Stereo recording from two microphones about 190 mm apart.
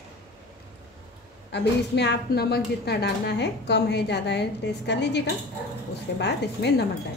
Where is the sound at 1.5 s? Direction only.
65° left (ahead or behind).